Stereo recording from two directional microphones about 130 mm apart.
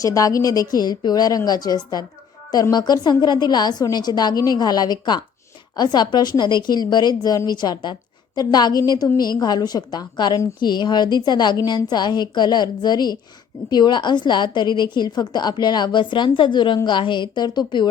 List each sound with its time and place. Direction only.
0.0 s a woman's voice: 25° left (ahead or behind)